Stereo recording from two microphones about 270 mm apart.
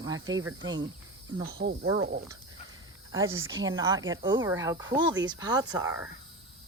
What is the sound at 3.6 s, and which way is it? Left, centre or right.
Speech, centre.